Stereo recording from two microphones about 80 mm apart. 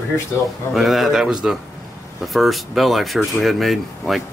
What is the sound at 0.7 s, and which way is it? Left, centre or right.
Speech, centre.